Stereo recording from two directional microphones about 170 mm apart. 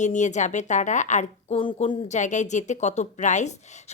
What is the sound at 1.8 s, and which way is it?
A woman's voice, 45° left (ahead or behind).